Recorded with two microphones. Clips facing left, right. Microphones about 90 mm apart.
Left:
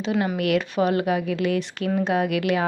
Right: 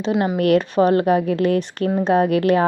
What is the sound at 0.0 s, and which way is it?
Speech, 25° right (ahead or behind).